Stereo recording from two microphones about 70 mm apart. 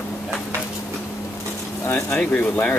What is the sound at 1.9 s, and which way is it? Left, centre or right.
Speech, left.